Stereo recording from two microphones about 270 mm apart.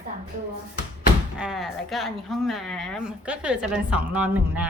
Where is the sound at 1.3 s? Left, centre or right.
Centre.